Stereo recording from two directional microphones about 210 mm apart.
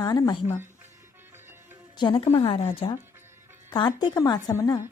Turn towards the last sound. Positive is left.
turn(degrees=15)  # may be behind; listen again after turning